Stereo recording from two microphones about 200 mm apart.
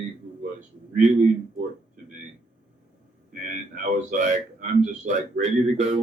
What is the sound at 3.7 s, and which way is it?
Speech, 40° right (ahead or behind).